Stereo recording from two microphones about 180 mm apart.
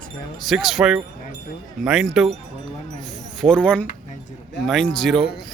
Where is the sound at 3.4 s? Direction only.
5° left (ahead or behind).